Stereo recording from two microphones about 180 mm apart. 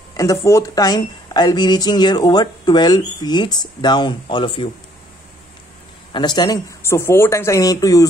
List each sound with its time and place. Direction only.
0.2 s speech: 15° left (ahead or behind)
6.1 s speech: 25° left (ahead or behind)